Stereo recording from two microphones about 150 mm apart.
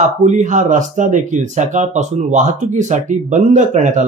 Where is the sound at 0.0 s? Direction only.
55° right (ahead or behind).